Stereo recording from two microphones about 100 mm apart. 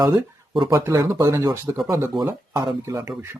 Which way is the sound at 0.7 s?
30° right (ahead or behind).